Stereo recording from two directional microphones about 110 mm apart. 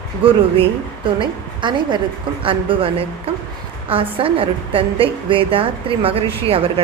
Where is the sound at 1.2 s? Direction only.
45° right (ahead or behind).